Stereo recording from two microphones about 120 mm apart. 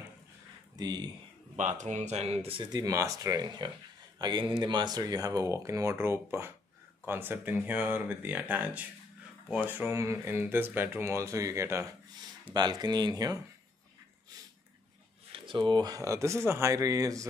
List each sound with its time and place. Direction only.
0.7 s speech: 35° right (ahead or behind)
1.6 s speech: 90° right; by 2.7 s 50° right (ahead or behind)
2.7 s speech: 30° right (ahead or behind)
12.5 s speech: 35° right (ahead or behind)
15.3 s speech: 45° right (ahead or behind); by 17.3 s 30° right (ahead or behind)